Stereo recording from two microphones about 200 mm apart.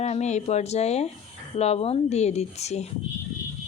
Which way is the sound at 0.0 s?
35° left (ahead or behind).